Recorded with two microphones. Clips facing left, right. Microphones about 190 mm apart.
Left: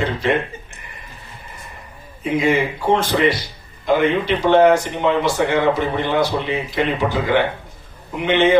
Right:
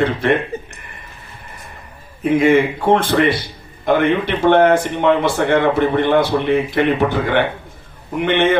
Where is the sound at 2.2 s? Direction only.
55° right (ahead or behind).